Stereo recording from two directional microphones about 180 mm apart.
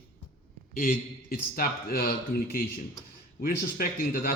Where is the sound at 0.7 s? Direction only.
50° left (ahead or behind).